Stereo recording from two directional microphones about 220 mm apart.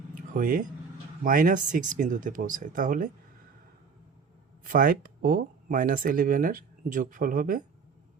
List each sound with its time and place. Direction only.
0.1 s a sound: 35° right (ahead or behind)
1.2 s speech: 40° right (ahead or behind)
4.7 s speech: 40° right (ahead or behind)